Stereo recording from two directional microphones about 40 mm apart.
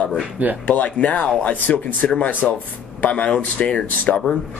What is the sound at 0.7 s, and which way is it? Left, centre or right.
Speech, left.